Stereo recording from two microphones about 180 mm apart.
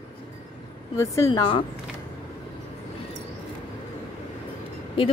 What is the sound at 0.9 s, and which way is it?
Speech, 15° left (ahead or behind).